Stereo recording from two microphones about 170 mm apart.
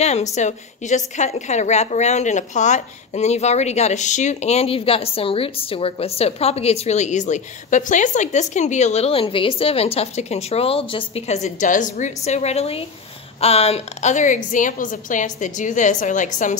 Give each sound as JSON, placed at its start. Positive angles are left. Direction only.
{"t": 0.0, "sound": "a woman's voice", "side_deg": 40}